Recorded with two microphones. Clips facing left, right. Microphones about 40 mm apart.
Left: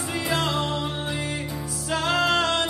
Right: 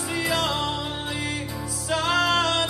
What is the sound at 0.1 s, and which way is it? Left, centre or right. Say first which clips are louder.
Music: even; left.